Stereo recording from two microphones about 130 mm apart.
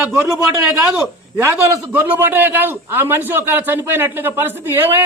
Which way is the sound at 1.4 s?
15° right (ahead or behind).